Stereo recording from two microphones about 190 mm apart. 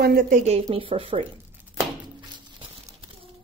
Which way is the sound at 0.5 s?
30° right (ahead or behind).